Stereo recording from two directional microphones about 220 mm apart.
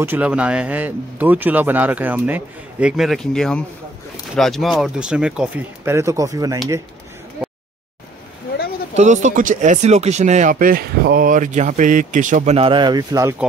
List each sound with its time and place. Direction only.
0.0 s speech: 10° right (ahead or behind)
8.9 s speech: 35° right (ahead or behind); by 13.5 s 10° right (ahead or behind)